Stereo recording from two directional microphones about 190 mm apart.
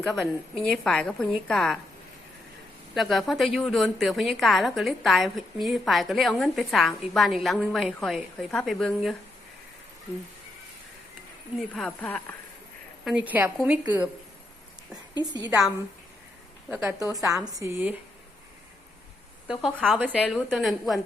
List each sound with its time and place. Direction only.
0.2 s a woman's voice: 5° left (ahead or behind)
2.9 s a woman's voice: centre (ahead or behind)
11.7 s a woman's voice: 5° left (ahead or behind)
13.1 s a woman's voice: 5° right (ahead or behind)
15.4 s a woman's voice: centre (ahead or behind)
17.2 s a woman's voice: 20° right (ahead or behind)
19.5 s a woman's voice: centre (ahead or behind)